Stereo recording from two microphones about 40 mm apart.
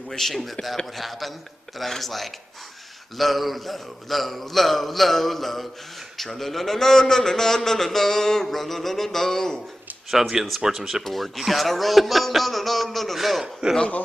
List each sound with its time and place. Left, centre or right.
0.1 s a man's voice: centre
10.1 s a man's voice: centre
13.4 s a man's voice: centre